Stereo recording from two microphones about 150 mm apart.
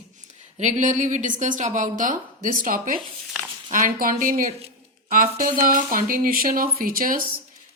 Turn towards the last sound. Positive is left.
turn(degrees=-70)  # may be behind; listen again after turning